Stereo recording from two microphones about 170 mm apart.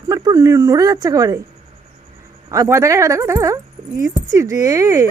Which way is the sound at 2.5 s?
15° right (ahead or behind).